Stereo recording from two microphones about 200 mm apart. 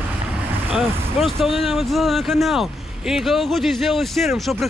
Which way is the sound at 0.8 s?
Centre (ahead or behind).